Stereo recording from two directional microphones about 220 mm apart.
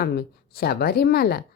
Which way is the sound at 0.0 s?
45° left (ahead or behind).